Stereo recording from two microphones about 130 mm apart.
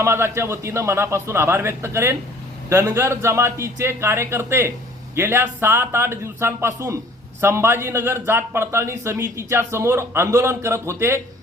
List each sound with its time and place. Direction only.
0.0 s a man's voice: 20° right (ahead or behind)